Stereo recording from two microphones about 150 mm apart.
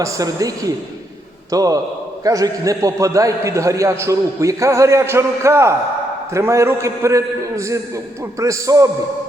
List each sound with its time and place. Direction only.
0.0 s a man's voice: 25° right (ahead or behind)